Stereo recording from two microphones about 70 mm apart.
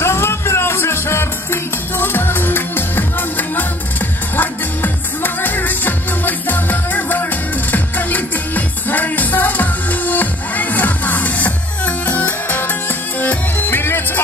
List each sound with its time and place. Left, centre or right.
0.0 s music: left